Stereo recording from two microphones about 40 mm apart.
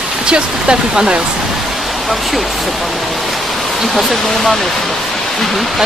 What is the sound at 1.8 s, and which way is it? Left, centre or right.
Speech, centre.